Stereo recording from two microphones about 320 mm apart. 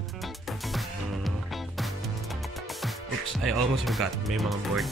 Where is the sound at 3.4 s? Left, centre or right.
Centre.